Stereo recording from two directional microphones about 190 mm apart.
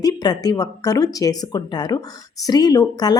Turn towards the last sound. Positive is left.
turn(degrees=20)  # may be behind; listen again after turning